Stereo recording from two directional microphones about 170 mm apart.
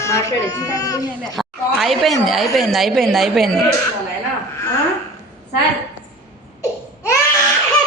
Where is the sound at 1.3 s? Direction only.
Centre (ahead or behind).